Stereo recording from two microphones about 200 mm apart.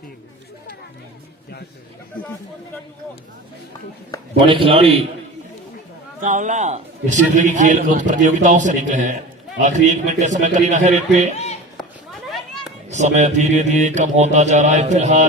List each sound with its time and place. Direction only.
4.4 s a man's voice: 25° right (ahead or behind)
6.2 s a man's voice: 40° right (ahead or behind)
12.9 s a man's voice: 35° right (ahead or behind)